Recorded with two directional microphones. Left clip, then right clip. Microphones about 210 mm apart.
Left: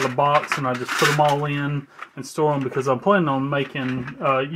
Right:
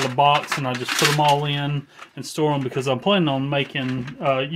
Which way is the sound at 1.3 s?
40° right (ahead or behind).